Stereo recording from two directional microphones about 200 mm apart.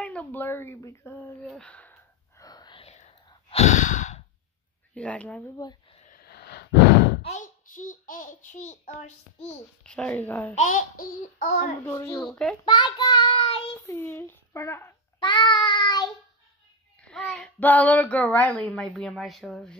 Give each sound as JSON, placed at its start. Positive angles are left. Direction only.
{"t": 0.0, "sound": "a sound", "side_deg": 5}
{"t": 3.3, "sound": "sigh", "side_deg": 30}
{"t": 4.9, "sound": "a child's voice", "side_deg": 5}
{"t": 5.6, "sound": "a sound", "side_deg": 25}
{"t": 6.0, "sound": "gasp", "side_deg": 50}
{"t": 7.2, "sound": "a child's voice", "side_deg": 40}
{"t": 9.8, "sound": "a child's voice", "side_deg": 5}
{"t": 10.5, "sound": "a child's voice", "side_deg": 40}
{"t": 11.8, "sound": "a child's voice", "side_deg": 10}
{"t": 12.3, "sound": "a child's voice", "side_deg": 0}
{"t": 12.6, "sound": "child singing", "side_deg": 20}
{"t": 13.7, "sound": "a child's voice", "side_deg": 10}
{"t": 15.1, "sound": "child singing", "side_deg": 25}
{"t": 17.0, "sound": "a child's voice", "side_deg": 5}